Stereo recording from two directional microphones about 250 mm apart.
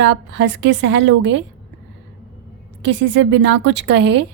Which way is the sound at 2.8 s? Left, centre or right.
Right.